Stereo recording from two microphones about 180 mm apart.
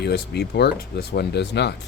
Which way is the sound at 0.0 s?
65° left (ahead or behind).